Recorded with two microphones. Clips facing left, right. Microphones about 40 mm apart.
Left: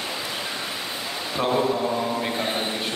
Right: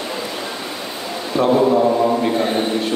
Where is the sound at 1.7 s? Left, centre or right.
Right.